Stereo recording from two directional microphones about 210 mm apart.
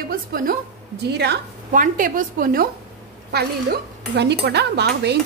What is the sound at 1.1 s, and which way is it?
A woman's voice, 50° right (ahead or behind).